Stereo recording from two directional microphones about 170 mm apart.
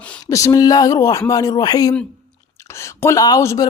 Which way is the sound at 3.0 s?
20° left (ahead or behind).